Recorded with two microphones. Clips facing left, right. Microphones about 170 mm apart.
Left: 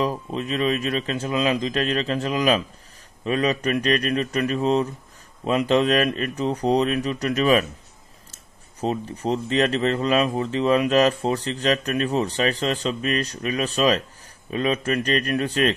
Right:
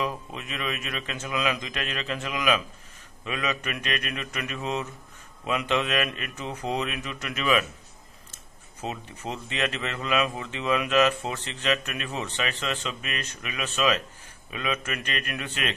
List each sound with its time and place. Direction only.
0.0 s speech: 35° left (ahead or behind)
8.8 s speech: 35° left (ahead or behind)